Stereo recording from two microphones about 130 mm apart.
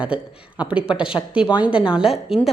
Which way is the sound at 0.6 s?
10° right (ahead or behind).